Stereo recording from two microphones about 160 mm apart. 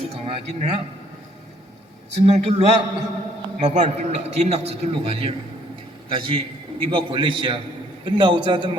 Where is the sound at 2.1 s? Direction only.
45° right (ahead or behind).